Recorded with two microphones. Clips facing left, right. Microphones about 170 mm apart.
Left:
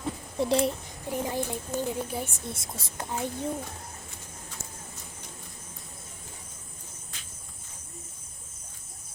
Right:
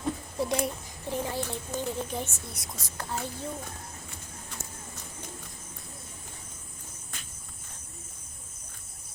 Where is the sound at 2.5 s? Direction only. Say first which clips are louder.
Left 4 dB; 25° left (ahead or behind).